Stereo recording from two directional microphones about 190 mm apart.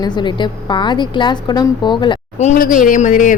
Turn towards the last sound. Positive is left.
turn(degrees=40)  # may be behind; listen again after turning